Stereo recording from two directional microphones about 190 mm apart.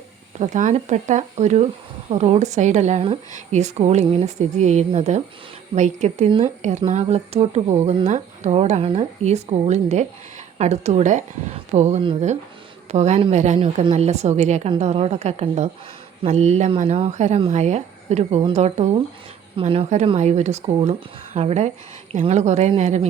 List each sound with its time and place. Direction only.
0.3 s speech: 40° right (ahead or behind)